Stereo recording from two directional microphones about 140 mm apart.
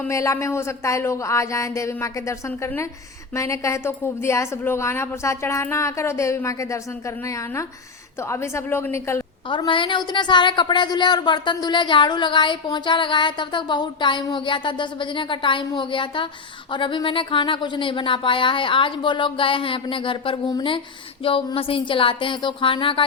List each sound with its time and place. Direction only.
0.1 s a woman's voice: 20° left (ahead or behind)
3.3 s a woman's voice: 20° left (ahead or behind)
8.3 s a woman's voice: 20° left (ahead or behind)
9.5 s a woman's voice: 35° left (ahead or behind)